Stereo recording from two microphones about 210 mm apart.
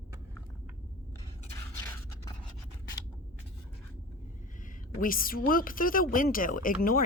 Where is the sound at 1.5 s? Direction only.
15° left (ahead or behind).